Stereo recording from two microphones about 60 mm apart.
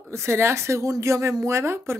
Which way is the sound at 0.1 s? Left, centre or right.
Right.